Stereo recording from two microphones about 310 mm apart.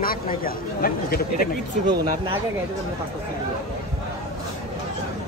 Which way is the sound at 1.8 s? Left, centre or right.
Centre.